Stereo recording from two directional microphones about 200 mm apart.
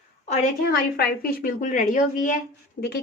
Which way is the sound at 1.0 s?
50° left (ahead or behind).